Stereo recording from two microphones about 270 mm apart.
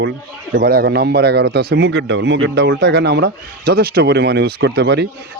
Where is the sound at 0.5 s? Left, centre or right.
Right.